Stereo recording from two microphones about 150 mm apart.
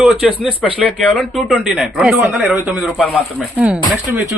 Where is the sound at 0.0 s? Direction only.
5° right (ahead or behind).